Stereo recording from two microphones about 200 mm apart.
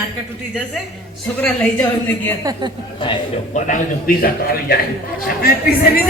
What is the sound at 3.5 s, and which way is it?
A man's voice, 40° left (ahead or behind).